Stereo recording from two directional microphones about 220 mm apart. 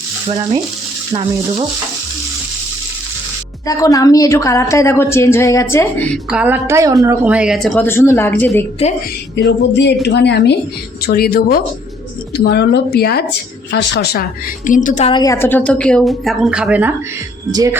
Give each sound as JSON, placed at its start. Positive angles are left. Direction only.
{"t": 0.3, "sound": "frying", "side_deg": -20}
{"t": 3.7, "sound": "a woman's voice", "side_deg": 15}
{"t": 6.3, "sound": "a woman's voice", "side_deg": -10}
{"t": 7.3, "sound": "a woman's voice", "side_deg": -5}
{"t": 9.3, "sound": "a woman's voice", "side_deg": 50}
{"t": 14.7, "sound": "a woman's voice", "side_deg": 35}
{"t": 15.1, "sound": "a woman's voice", "side_deg": 15}